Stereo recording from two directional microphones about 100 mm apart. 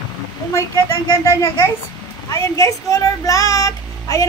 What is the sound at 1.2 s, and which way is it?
A child's voice, 30° left (ahead or behind).